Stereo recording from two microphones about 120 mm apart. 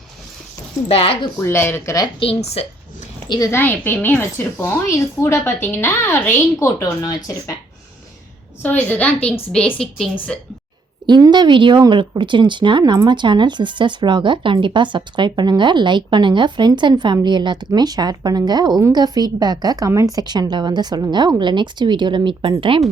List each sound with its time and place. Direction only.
0.9 s speech: 55° left (ahead or behind)
1.4 s a woman's voice: 20° left (ahead or behind)
2.1 s speech: 50° left (ahead or behind)
3.2 s a woman's voice: 35° left (ahead or behind)
3.5 s a woman's voice: 15° left (ahead or behind)
8.6 s a woman's voice: 15° left (ahead or behind)
11.0 s speech: 40° right (ahead or behind)